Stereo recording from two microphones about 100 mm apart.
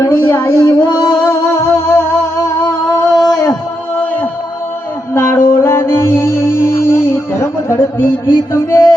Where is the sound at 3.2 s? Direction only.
35° left (ahead or behind).